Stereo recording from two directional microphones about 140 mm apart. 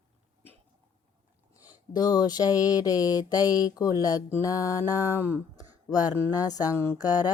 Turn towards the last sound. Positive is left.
turn(degrees=25)  # may be behind; listen again after turning